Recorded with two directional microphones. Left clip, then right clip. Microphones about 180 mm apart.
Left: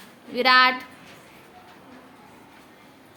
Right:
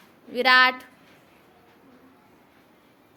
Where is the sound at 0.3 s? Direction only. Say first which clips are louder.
Left 1 dB; 35° right (ahead or behind).